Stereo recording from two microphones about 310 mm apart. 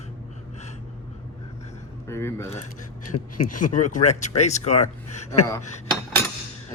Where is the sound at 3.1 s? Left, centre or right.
Left.